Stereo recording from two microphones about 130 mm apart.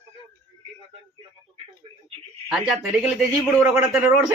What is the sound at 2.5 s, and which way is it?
A man's voice, 5° right (ahead or behind).